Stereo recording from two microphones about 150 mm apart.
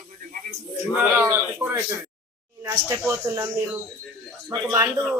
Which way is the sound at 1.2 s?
15° right (ahead or behind).